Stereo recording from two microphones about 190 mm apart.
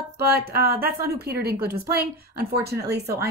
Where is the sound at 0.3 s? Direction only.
50° right (ahead or behind).